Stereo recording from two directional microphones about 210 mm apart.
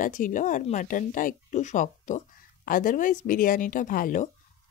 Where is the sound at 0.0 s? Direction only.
40° left (ahead or behind).